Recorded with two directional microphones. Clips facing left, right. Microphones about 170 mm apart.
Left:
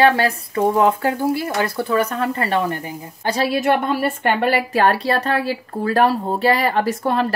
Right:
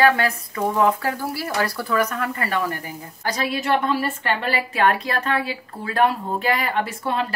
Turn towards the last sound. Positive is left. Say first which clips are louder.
# left 5 dB
turn(degrees=45)  # may be behind; listen again after turning